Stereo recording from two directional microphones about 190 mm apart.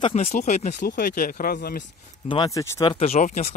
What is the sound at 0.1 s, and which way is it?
Speech, 40° left (ahead or behind).